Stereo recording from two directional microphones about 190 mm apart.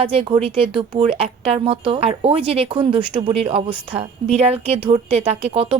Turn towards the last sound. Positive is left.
turn(degrees=-30)  # may be behind; listen again after turning